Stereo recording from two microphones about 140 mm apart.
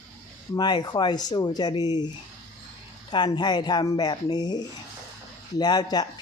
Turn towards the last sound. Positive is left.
turn(degrees=30)  # may be behind; listen again after turning